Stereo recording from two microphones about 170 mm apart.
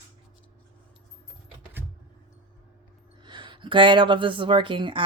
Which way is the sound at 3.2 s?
25° right (ahead or behind).